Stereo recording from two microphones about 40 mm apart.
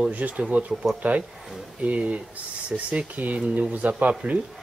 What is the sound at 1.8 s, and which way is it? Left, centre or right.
Speech, right.